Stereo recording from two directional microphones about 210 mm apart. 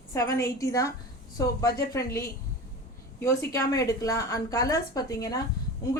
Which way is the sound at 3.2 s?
15° left (ahead or behind).